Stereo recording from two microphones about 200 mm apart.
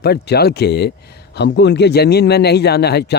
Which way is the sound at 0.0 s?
55° left (ahead or behind).